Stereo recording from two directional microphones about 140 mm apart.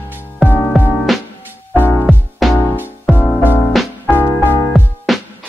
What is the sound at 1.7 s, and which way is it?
Music, 15° left (ahead or behind).